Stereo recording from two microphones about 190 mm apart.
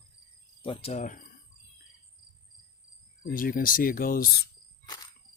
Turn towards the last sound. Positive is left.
turn(degrees=55)  # may be behind; listen again after turning